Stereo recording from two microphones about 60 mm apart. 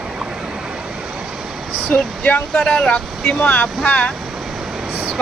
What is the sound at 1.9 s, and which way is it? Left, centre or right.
Vehicle, left.